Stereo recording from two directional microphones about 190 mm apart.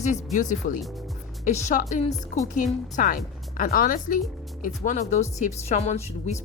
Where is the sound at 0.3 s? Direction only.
45° left (ahead or behind).